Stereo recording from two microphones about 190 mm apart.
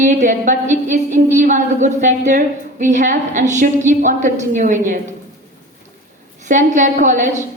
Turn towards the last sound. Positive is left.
turn(degrees=-40)  # may be behind; listen again after turning